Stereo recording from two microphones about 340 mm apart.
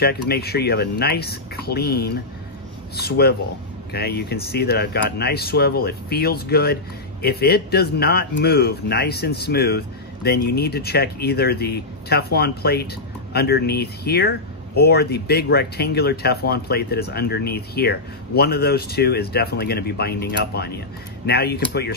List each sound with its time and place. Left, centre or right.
0.0 s speech: left